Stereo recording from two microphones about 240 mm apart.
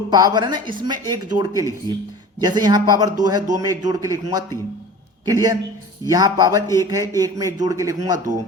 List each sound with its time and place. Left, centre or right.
0.1 s a man's voice: centre